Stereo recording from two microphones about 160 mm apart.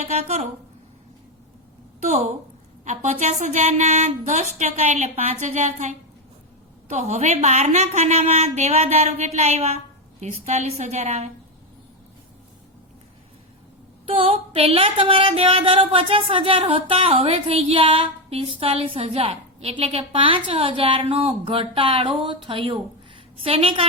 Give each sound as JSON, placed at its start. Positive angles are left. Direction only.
{"t": 0.0, "sound": "a woman's voice", "side_deg": -45}
{"t": 2.0, "sound": "a woman's voice", "side_deg": -45}
{"t": 14.1, "sound": "speech", "side_deg": -35}